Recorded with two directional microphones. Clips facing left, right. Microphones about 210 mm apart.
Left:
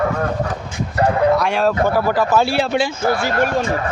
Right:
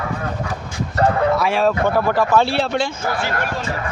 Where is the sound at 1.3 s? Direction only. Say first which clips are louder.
Left 1 dB; centre (ahead or behind).